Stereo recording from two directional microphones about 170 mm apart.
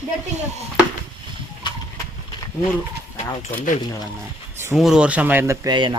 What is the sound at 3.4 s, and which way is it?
Speech, 45° left (ahead or behind).